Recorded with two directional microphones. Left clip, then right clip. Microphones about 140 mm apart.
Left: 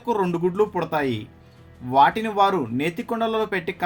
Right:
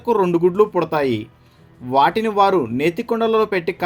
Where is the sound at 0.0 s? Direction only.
25° right (ahead or behind).